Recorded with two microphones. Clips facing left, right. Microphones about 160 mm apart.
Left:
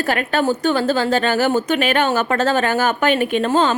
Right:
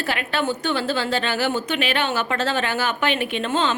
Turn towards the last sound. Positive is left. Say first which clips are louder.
# left 6 dB
turn(degrees=40)  # may be behind; listen again after turning